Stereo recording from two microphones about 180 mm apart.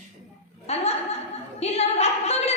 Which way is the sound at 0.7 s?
35° left (ahead or behind).